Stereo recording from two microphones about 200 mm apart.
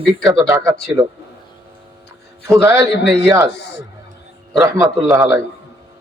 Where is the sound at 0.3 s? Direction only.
15° right (ahead or behind).